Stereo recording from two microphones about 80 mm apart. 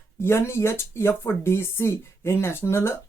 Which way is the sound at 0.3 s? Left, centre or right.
Left.